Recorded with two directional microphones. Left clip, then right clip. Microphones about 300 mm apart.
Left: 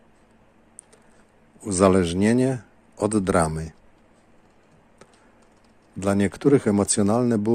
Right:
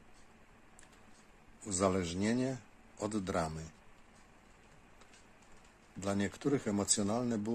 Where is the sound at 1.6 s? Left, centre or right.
Left.